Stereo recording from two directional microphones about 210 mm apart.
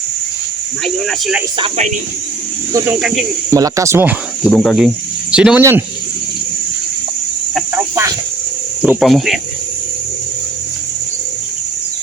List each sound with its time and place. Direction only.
1.5 s speech: 30° right (ahead or behind)
3.5 s speech: 15° right (ahead or behind)
4.5 s speech: centre (ahead or behind)
8.8 s speech: centre (ahead or behind)